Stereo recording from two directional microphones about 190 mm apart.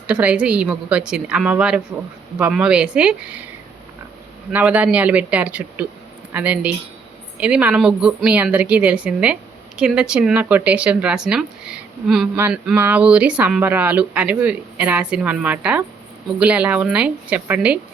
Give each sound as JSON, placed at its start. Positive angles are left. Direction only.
{"t": 0.1, "sound": "a woman's voice", "side_deg": -5}
{"t": 4.5, "sound": "a woman's voice", "side_deg": -5}